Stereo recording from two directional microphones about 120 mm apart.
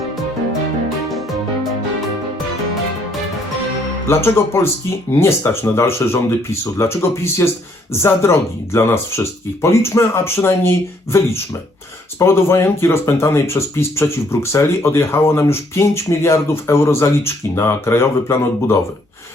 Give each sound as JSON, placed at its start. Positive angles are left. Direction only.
{"t": 4.0, "sound": "speech", "side_deg": 20}
{"t": 12.2, "sound": "speech", "side_deg": 20}